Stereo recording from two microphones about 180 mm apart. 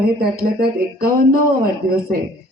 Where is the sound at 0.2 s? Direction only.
55° right (ahead or behind).